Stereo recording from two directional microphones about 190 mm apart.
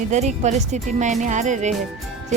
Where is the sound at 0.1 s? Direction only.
40° right (ahead or behind).